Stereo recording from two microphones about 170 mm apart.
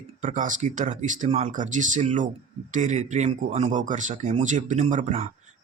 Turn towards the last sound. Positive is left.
turn(degrees=-40)  # may be behind; listen again after turning